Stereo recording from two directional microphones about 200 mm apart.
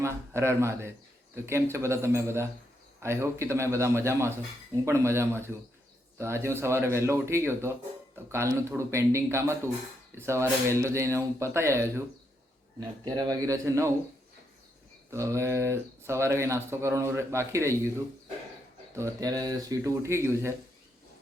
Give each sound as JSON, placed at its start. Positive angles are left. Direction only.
{"t": 0.0, "sound": "speech", "side_deg": -15}
{"t": 13.1, "sound": "speech", "side_deg": -20}
{"t": 15.1, "sound": "speech", "side_deg": -15}
{"t": 18.9, "sound": "speech", "side_deg": -15}